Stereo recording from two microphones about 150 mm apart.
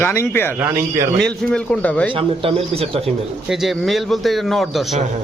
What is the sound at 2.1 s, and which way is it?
Speech, 35° right (ahead or behind).